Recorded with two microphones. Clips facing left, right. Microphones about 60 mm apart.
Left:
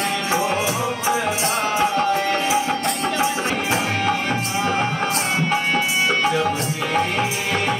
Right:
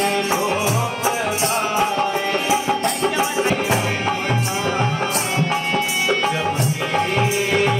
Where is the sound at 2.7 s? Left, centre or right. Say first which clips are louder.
Right 2 dB; centre.